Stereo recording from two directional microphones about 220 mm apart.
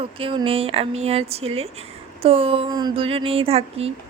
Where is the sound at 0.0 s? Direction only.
25° right (ahead or behind).